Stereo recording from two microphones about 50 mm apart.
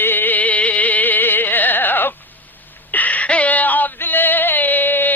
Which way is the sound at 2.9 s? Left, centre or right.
Left.